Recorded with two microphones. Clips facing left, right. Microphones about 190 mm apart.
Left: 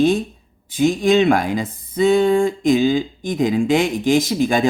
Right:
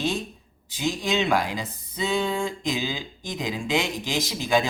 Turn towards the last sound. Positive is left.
turn(degrees=50)  # may be behind; listen again after turning